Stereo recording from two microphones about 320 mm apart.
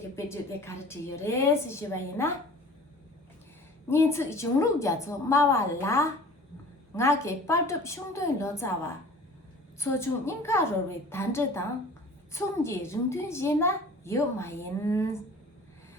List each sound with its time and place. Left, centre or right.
0.2 s a woman's voice: centre
3.8 s a woman's voice: centre